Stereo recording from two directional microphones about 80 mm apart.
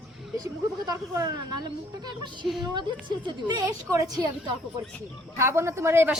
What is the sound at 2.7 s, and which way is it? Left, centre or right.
Speech, right.